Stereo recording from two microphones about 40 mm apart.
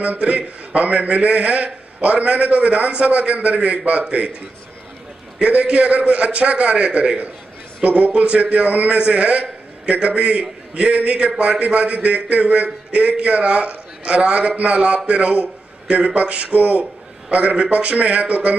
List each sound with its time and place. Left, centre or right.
0.0 s a man's voice: right
5.4 s a man's voice: right